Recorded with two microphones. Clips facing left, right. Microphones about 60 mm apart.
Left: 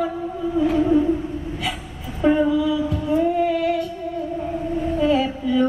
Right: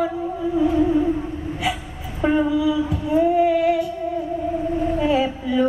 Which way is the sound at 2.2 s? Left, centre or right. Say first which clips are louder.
Left 2 dB; right.